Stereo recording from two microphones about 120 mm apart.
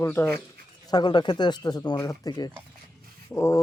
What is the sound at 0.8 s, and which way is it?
Speech, 35° left (ahead or behind).